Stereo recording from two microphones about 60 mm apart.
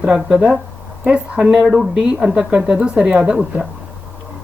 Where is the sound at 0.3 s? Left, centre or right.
Right.